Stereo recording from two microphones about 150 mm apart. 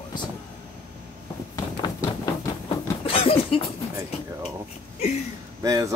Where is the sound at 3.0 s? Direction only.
40° left (ahead or behind).